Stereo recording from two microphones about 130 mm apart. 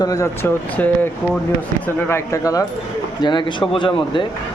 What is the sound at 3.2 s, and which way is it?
Speech, 35° left (ahead or behind).